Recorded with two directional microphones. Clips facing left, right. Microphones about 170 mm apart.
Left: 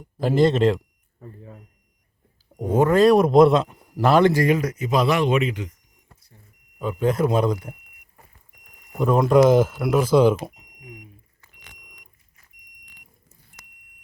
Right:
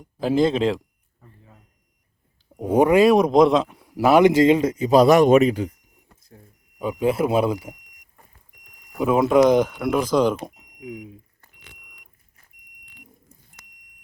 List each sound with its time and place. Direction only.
0.2 s speech: centre (ahead or behind)
1.2 s a sound: 60° left (ahead or behind)
2.6 s a man's voice: 15° right (ahead or behind); by 5.7 s 35° right (ahead or behind)
6.7 s a man's voice: 10° right (ahead or behind)
9.0 s speech: 5° right (ahead or behind)
10.4 s smoke detector: centre (ahead or behind)